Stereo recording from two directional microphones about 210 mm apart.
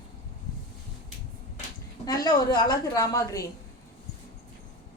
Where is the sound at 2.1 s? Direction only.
15° left (ahead or behind).